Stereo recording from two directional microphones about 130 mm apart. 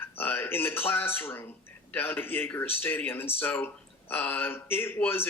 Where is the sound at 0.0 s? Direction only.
15° left (ahead or behind).